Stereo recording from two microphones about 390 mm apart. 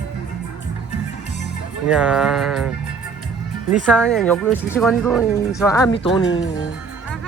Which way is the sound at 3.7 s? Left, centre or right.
Centre.